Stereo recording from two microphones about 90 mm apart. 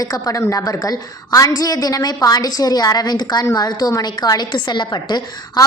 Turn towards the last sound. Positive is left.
turn(degrees=55)  # may be behind; listen again after turning